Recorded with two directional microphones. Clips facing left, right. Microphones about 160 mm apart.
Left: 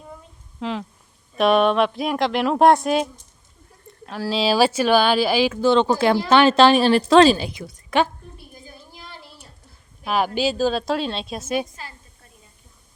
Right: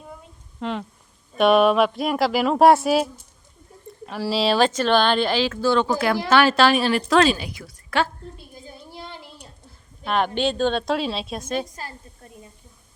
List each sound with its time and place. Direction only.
0.6 s speech: centre (ahead or behind); by 8.1 s 20° left (ahead or behind)
8.4 s a sound: 25° right (ahead or behind)
10.0 s speech: 5° left (ahead or behind)